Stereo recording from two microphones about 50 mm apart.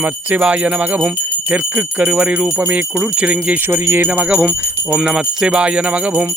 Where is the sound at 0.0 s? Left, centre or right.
Right.